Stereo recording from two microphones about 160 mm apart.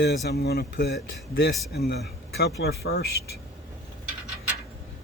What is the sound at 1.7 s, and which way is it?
Speech, 90° left.